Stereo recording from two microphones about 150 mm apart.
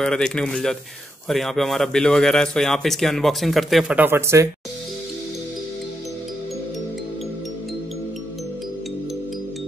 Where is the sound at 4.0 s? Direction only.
15° right (ahead or behind).